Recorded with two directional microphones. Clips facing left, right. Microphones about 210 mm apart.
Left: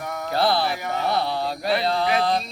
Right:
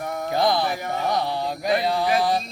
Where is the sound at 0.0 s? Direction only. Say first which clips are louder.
Right 2 dB; 30° right (ahead or behind).